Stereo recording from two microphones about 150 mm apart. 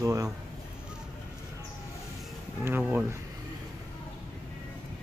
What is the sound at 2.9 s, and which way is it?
Speech, 15° right (ahead or behind).